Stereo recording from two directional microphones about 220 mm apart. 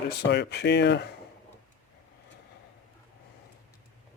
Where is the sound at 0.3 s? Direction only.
50° left (ahead or behind).